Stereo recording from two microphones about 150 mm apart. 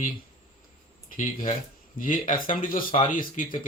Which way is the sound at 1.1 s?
60° left (ahead or behind).